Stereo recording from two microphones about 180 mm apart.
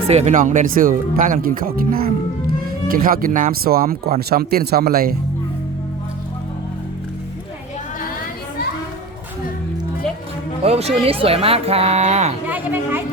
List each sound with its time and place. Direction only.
0.1 s speech: 40° right (ahead or behind); by 5.1 s 55° right (ahead or behind)
10.6 s speech: 35° right (ahead or behind)
12.5 s a sound: 10° right (ahead or behind)